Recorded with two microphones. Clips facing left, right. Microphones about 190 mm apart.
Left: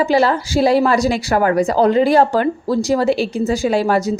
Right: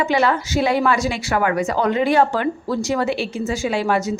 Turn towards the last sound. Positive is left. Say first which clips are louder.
# left 4 dB
turn(degrees=35)  # may be behind; listen again after turning